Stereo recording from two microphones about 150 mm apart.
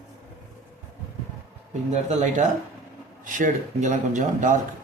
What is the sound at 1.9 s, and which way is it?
Speech, 50° right (ahead or behind).